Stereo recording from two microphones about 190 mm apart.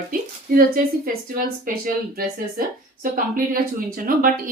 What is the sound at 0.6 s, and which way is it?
Speech, 50° right (ahead or behind).